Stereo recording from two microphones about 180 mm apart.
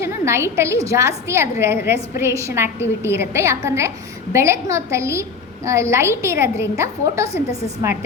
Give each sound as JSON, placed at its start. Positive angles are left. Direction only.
{"t": 0.0, "sound": "a woman's voice", "side_deg": -15}